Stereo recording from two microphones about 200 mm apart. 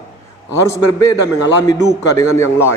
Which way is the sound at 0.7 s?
15° left (ahead or behind).